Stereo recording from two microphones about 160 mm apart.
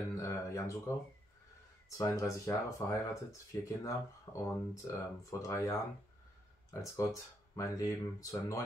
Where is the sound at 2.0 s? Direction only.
20° left (ahead or behind).